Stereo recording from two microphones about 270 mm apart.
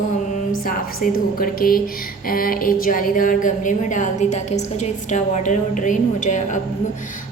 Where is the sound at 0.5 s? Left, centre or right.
Left.